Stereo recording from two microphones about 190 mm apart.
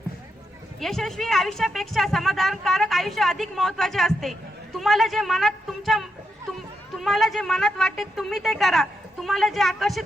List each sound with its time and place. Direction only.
0.8 s speech: centre (ahead or behind)